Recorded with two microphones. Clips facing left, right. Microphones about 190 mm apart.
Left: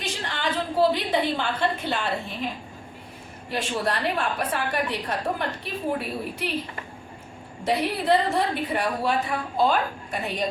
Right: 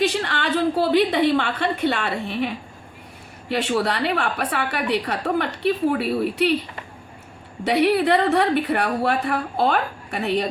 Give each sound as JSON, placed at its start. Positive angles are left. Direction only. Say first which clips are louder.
{"t": 0.0, "sound": "a woman's voice", "louder": "right 7 dB", "side_deg": -70}
{"t": 3.5, "sound": "a woman's voice", "louder": "right 5 dB", "side_deg": -70}
{"t": 7.6, "sound": "a woman's voice", "louder": "right 7 dB", "side_deg": -70}